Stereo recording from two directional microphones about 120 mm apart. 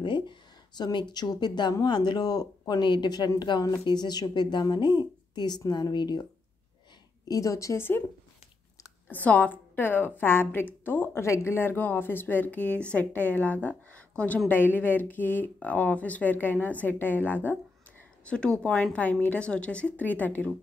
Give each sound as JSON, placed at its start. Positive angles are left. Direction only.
{"t": 0.0, "sound": "a sound", "side_deg": 40}
{"t": 1.1, "sound": "speech", "side_deg": 35}
{"t": 7.2, "sound": "a woman's voice", "side_deg": 30}
{"t": 9.1, "sound": "a woman's voice", "side_deg": 15}